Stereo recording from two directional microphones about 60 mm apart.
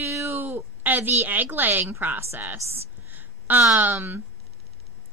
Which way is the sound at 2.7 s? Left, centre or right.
Right.